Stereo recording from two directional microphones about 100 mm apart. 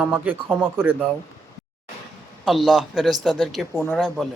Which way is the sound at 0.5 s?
15° right (ahead or behind).